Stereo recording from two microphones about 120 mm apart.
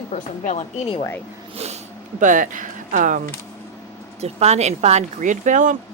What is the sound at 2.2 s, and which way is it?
Speech, 90° right.